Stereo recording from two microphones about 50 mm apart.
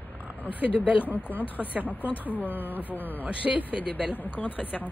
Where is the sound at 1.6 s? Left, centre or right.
Right.